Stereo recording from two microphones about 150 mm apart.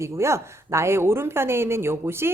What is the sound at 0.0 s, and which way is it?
Speech, 20° right (ahead or behind).